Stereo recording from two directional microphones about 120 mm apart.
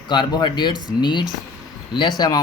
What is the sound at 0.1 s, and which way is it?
Speech, 40° left (ahead or behind).